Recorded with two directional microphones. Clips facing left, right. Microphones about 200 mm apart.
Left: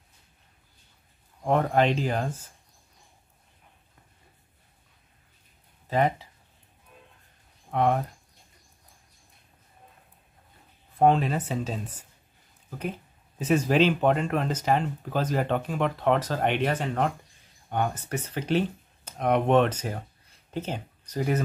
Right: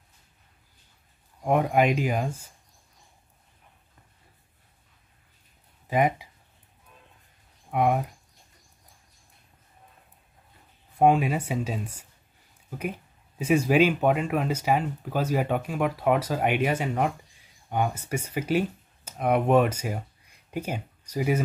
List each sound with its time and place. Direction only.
1.4 s speech: 10° right (ahead or behind)
5.9 s speech: 15° right (ahead or behind)
7.7 s speech: 10° right (ahead or behind)
11.0 s speech: 10° right (ahead or behind)
13.4 s speech: 10° right (ahead or behind)